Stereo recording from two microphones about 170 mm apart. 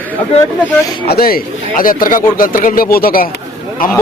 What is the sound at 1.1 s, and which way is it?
Speech, 60° left (ahead or behind).